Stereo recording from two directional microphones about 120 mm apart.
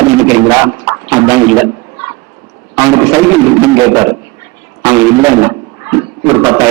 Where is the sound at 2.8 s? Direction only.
25° right (ahead or behind).